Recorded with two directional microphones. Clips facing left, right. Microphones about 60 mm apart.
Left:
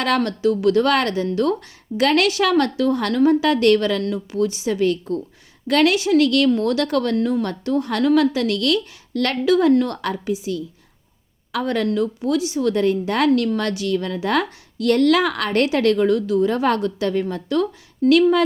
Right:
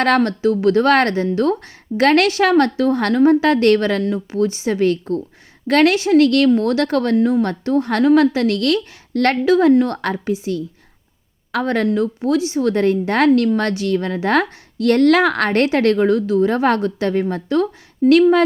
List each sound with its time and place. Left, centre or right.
0.2 s a woman's voice: right
7.2 s a woman's voice: right
7.4 s a woman's voice: right